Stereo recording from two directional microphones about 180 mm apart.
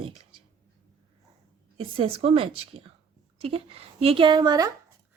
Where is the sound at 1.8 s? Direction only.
30° right (ahead or behind).